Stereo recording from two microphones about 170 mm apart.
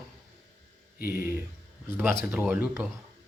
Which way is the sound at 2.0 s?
10° right (ahead or behind).